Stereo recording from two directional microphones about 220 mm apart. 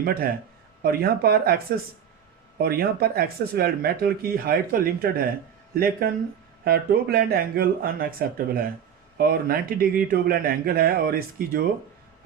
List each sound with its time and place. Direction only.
0.0 s speech: 40° right (ahead or behind)